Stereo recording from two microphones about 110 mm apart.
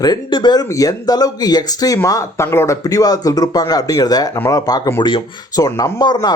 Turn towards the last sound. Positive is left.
turn(degrees=40)  # may be behind; listen again after turning